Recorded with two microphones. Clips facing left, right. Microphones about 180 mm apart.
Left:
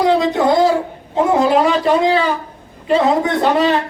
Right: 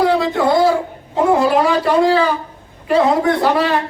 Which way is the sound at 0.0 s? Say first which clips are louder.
Left 1 dB; 20° left (ahead or behind).